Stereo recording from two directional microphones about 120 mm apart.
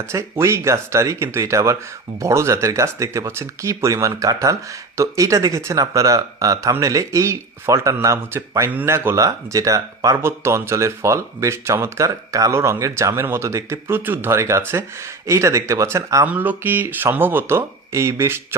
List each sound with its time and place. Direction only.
0.1 s speech: 25° right (ahead or behind)
16.2 s speech: 15° right (ahead or behind)